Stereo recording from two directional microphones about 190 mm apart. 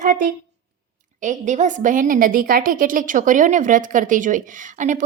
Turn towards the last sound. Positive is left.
turn(degrees=-40)  # may be behind; listen again after turning